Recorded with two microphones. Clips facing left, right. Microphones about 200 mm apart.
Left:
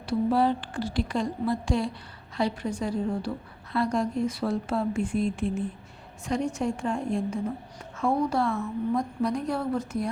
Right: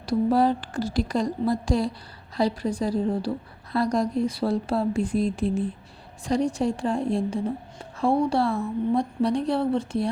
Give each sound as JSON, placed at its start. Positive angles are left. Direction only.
{"t": 0.0, "sound": "a woman's voice", "side_deg": -40}